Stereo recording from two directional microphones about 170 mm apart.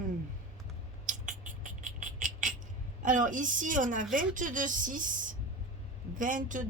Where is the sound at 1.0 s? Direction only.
50° right (ahead or behind).